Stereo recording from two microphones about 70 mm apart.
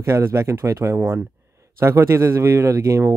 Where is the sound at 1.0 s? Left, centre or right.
Right.